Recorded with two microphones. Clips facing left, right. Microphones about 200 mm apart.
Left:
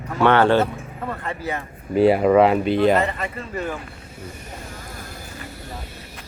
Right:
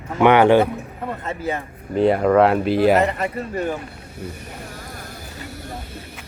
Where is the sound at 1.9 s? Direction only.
5° left (ahead or behind).